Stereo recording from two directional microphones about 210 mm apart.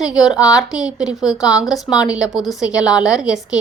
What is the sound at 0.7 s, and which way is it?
A woman's voice, 5° right (ahead or behind).